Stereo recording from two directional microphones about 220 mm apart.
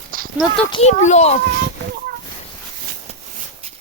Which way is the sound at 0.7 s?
30° left (ahead or behind).